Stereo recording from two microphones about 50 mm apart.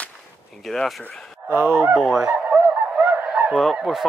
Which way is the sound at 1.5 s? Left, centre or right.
Right.